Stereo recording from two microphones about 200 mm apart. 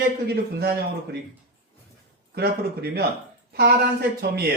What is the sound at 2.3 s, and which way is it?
Speech, 50° right (ahead or behind).